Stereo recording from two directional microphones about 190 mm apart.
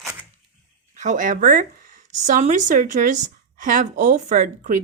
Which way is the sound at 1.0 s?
40° right (ahead or behind).